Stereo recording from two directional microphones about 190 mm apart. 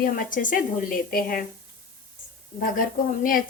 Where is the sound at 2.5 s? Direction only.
45° left (ahead or behind).